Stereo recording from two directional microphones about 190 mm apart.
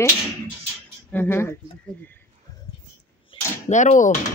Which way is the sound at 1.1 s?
10° left (ahead or behind).